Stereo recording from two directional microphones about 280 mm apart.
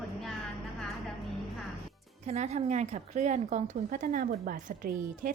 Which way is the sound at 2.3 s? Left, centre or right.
Right.